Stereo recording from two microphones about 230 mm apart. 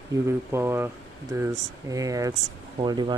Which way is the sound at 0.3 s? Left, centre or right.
Centre.